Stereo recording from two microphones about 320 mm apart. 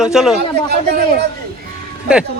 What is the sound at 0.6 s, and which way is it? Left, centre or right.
Speech, right.